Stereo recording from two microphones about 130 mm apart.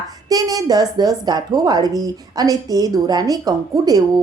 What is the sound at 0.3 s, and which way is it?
A woman's voice, 30° right (ahead or behind).